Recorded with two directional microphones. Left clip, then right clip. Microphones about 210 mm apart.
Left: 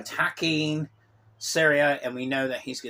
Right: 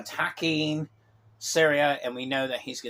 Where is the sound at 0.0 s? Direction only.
25° left (ahead or behind).